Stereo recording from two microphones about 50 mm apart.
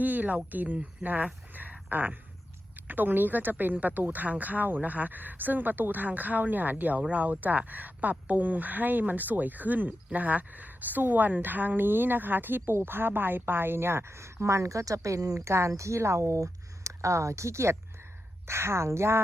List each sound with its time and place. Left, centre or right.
0.0 s speech: right
18.4 s speech: right